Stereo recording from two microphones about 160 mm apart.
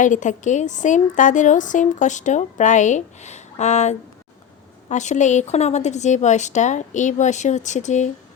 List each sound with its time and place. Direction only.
0.0 s a woman's voice: 50° left (ahead or behind)